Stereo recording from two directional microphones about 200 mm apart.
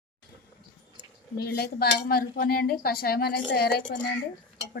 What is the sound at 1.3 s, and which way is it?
Speech, 50° left (ahead or behind).